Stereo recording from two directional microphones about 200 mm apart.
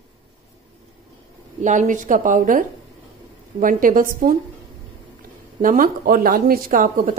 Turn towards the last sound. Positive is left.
turn(degrees=-40)  # may be behind; listen again after turning